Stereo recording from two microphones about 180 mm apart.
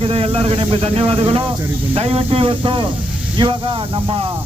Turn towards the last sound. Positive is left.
turn(degrees=-30)  # may be behind; listen again after turning